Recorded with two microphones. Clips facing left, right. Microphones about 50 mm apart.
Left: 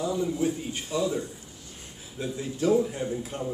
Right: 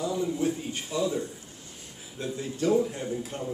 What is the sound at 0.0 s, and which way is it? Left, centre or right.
A man's voice, centre.